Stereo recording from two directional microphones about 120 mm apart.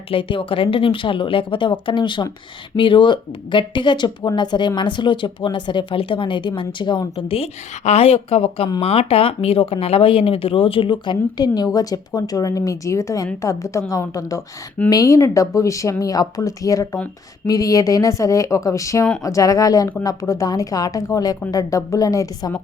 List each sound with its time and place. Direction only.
0.1 s speech: 45° left (ahead or behind)
7.2 s speech: 50° left (ahead or behind); by 22.5 s 30° left (ahead or behind)